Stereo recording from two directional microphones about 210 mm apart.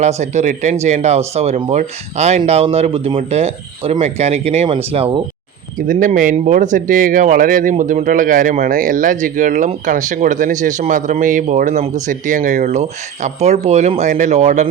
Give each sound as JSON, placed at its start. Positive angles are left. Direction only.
{"t": 0.0, "sound": "speech", "side_deg": -30}
{"t": 5.9, "sound": "speech", "side_deg": -40}